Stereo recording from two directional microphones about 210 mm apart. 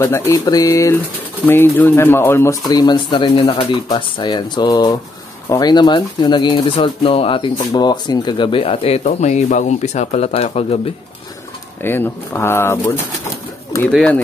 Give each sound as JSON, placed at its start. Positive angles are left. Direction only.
{"t": 0.0, "sound": "speech", "side_deg": 15}
{"t": 11.8, "sound": "speech", "side_deg": 10}
{"t": 13.9, "sound": "speech", "side_deg": 5}